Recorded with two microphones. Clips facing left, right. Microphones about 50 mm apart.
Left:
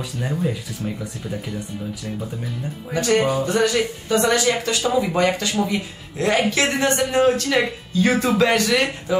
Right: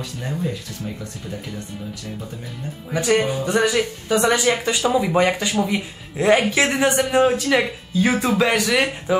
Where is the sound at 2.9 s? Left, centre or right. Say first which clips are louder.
Even; centre.